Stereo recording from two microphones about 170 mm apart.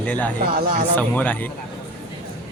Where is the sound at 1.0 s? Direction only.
10° left (ahead or behind).